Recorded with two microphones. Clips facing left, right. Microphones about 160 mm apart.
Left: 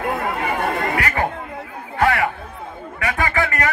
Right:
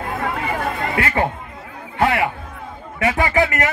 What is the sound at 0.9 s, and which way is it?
A man's voice, 25° right (ahead or behind).